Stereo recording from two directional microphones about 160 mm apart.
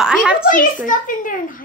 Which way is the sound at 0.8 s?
55° left (ahead or behind).